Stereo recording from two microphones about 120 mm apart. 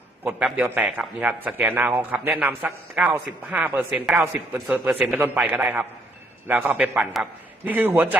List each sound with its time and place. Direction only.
0.3 s a man's voice: 10° right (ahead or behind)
6.7 s a man's voice: 5° right (ahead or behind)